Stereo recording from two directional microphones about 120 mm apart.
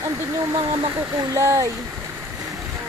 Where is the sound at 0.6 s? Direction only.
50° right (ahead or behind).